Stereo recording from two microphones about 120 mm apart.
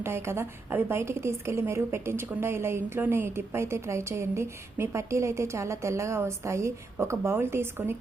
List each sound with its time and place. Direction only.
0.0 s a woman's voice: 20° right (ahead or behind)